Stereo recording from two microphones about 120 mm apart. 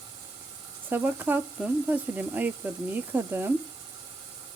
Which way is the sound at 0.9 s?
15° right (ahead or behind).